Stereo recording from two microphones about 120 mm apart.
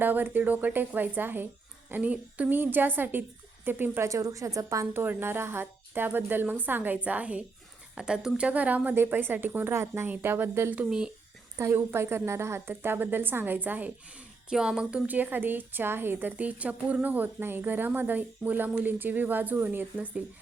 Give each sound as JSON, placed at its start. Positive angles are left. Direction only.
{"t": 0.0, "sound": "a woman's voice", "side_deg": -15}
{"t": 10.8, "sound": "speech", "side_deg": -5}
{"t": 11.5, "sound": "a woman's voice", "side_deg": -20}